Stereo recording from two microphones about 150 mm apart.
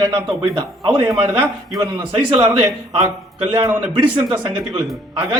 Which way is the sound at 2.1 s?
15° right (ahead or behind).